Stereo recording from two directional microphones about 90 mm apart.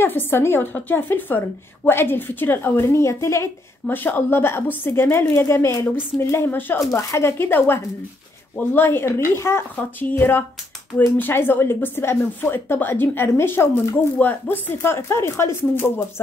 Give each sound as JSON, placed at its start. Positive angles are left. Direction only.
{"t": 0.0, "sound": "a woman's voice", "side_deg": 25}
{"t": 3.8, "sound": "a woman's voice", "side_deg": 20}